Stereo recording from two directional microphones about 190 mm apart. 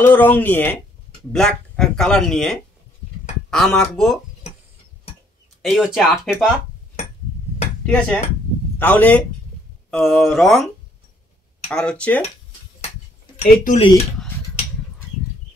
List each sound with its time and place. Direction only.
0.0 s speech: 10° left (ahead or behind)
5.6 s speech: centre (ahead or behind)
7.8 s speech: 5° left (ahead or behind)
11.7 s speech: 5° left (ahead or behind)
13.4 s speech: 30° left (ahead or behind)